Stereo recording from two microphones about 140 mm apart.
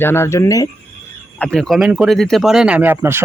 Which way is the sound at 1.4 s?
5° left (ahead or behind).